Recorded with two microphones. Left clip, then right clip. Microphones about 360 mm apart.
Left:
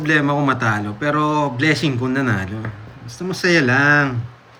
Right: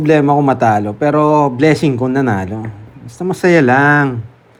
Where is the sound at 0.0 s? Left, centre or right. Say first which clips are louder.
Right 6 dB; centre.